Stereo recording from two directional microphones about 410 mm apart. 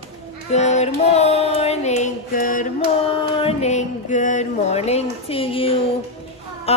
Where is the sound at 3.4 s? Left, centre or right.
Centre.